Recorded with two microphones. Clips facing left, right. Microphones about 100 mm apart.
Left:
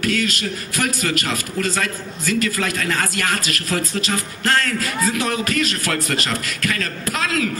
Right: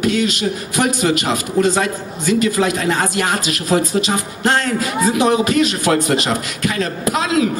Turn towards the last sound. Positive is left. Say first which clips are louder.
# right 6 dB
turn(degrees=-10)  # may be behind; listen again after turning